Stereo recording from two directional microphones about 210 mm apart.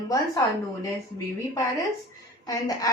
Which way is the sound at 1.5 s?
15° left (ahead or behind).